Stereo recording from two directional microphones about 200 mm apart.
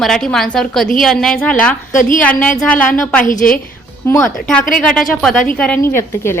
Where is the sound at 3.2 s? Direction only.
40° left (ahead or behind).